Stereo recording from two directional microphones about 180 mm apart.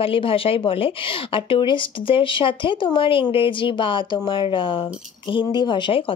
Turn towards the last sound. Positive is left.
turn(degrees=30)  # may be behind; listen again after turning